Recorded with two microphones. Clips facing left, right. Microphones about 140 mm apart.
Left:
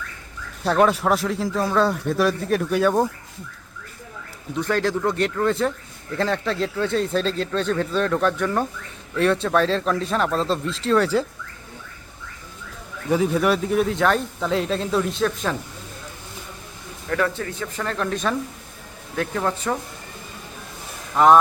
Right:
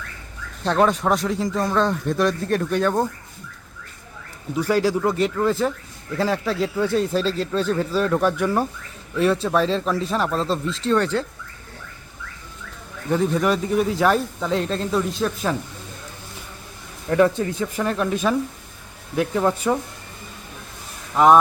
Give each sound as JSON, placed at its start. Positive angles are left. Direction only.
{"t": 0.6, "sound": "speech", "side_deg": 5}
{"t": 4.5, "sound": "speech", "side_deg": -5}
{"t": 13.1, "sound": "speech", "side_deg": 5}
{"t": 17.1, "sound": "a man's voice", "side_deg": -20}
{"t": 21.2, "sound": "speech", "side_deg": 0}